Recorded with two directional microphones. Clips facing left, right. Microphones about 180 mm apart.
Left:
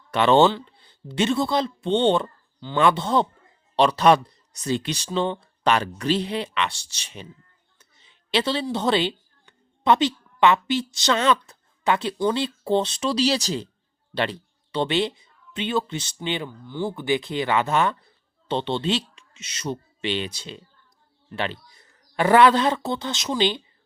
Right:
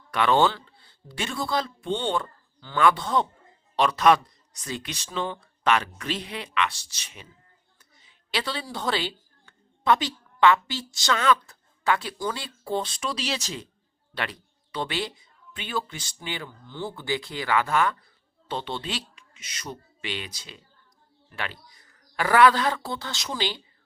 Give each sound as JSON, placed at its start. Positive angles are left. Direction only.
{"t": 0.1, "sound": "a man's voice", "side_deg": 25}